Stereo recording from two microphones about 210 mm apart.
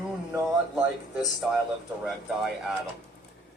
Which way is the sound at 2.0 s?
Centre (ahead or behind).